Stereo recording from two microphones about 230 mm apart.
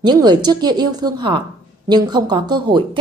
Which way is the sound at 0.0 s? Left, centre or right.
Centre.